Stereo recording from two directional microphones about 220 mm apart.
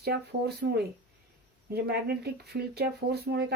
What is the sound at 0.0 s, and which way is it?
Speech, 45° right (ahead or behind).